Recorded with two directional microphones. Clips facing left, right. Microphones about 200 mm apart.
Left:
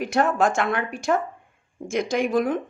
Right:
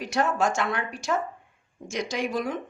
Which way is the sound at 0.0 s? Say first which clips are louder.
Left 4 dB; 55° left (ahead or behind).